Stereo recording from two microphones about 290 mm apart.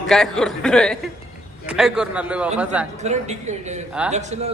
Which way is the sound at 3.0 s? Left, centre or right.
Right.